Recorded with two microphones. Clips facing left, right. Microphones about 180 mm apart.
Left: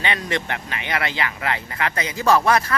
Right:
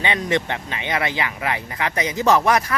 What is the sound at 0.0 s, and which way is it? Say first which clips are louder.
Speech: right 3 dB; 20° right (ahead or behind).